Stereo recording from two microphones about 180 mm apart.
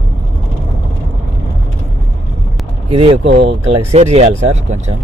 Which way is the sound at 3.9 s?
35° right (ahead or behind).